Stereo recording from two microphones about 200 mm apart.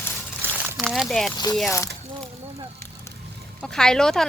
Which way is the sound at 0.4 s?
10° right (ahead or behind).